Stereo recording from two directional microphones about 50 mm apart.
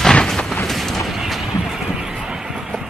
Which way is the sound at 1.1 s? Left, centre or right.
Centre.